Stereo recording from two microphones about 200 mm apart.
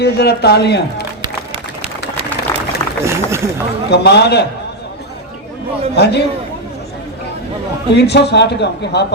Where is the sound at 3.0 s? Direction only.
15° right (ahead or behind).